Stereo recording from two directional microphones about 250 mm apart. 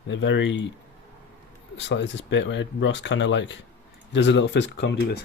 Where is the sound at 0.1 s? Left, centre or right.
Left.